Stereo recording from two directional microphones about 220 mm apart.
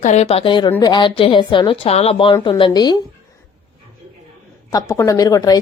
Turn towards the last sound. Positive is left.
turn(degrees=15)  # may be behind; listen again after turning